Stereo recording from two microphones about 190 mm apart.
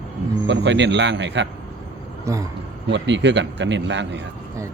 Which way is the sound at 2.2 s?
15° right (ahead or behind).